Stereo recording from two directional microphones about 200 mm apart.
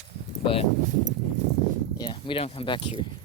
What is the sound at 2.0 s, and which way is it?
Speech, 25° left (ahead or behind).